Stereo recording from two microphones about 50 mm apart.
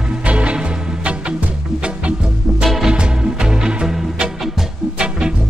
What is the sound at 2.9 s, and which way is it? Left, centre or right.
Music, centre.